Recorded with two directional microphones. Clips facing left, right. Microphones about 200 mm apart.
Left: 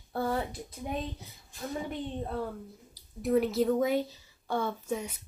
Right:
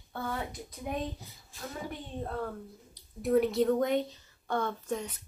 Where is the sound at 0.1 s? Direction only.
35° left (ahead or behind).